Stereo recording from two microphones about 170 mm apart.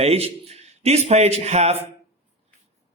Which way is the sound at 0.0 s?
35° right (ahead or behind).